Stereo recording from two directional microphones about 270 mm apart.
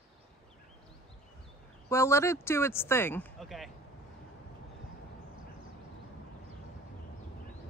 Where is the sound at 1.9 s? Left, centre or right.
Centre.